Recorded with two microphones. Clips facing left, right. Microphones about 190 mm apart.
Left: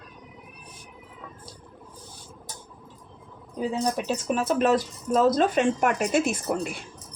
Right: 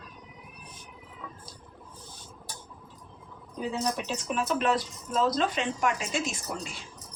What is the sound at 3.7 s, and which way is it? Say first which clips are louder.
Speech: left 4 dB; 35° left (ahead or behind).